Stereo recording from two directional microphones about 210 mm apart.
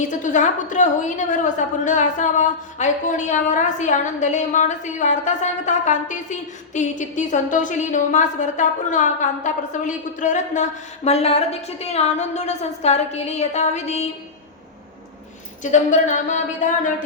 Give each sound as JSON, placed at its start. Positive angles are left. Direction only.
{"t": 0.1, "sound": "a woman's voice", "side_deg": 35}
{"t": 15.6, "sound": "a woman's voice", "side_deg": 35}